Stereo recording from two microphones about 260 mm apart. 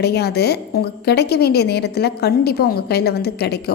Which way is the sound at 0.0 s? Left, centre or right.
Left.